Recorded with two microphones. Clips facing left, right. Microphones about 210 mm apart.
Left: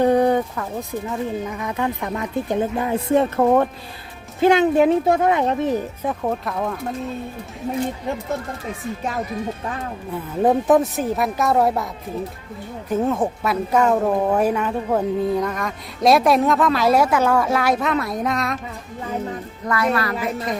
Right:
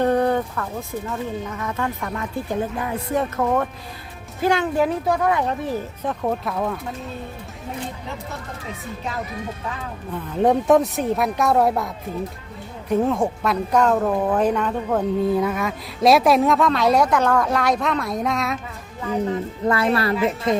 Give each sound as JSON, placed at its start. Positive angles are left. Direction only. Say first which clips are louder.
{"t": 0.0, "sound": "speech", "louder": "left 3 dB", "side_deg": 15}
{"t": 6.0, "sound": "speech", "louder": "left 1 dB", "side_deg": 5}
{"t": 10.4, "sound": "speech", "louder": "even", "side_deg": 0}
{"t": 12.9, "sound": "speech", "louder": "right 1 dB", "side_deg": 0}
{"t": 19.6, "sound": "speech", "louder": "right 1 dB", "side_deg": -30}